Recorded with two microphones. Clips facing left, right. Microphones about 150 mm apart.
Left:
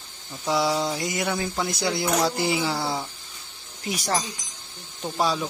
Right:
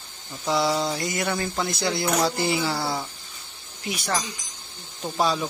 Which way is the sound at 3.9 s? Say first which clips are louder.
Left 1 dB; 40° left (ahead or behind).